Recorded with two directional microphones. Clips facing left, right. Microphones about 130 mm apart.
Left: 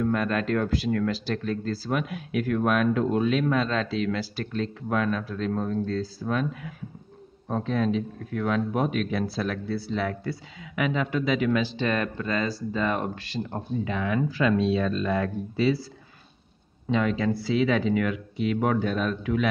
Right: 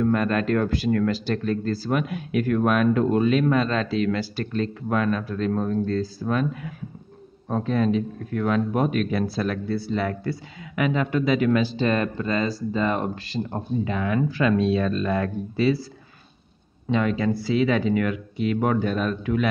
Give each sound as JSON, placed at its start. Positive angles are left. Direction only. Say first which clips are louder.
{"t": 0.0, "sound": "speech", "louder": "right 3 dB", "side_deg": -45}
{"t": 14.3, "sound": "speech", "louder": "right 2 dB", "side_deg": -55}
{"t": 16.9, "sound": "speech", "louder": "right 2 dB", "side_deg": -50}